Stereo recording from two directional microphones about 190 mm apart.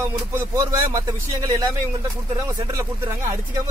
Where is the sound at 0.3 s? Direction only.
15° right (ahead or behind).